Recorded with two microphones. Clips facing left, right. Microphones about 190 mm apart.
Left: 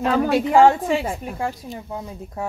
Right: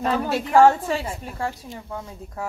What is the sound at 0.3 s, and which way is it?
A woman's voice, 10° left (ahead or behind).